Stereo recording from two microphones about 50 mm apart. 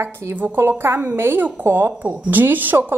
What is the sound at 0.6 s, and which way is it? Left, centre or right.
A woman's voice, right.